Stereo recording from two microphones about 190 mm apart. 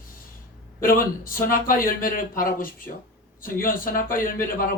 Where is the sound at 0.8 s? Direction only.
45° left (ahead or behind).